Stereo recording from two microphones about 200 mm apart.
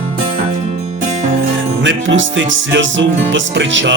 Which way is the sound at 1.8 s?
70° right (ahead or behind).